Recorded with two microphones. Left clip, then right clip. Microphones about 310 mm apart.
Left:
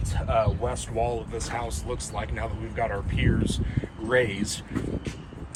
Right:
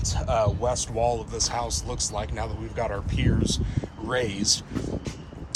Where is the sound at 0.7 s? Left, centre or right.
Right.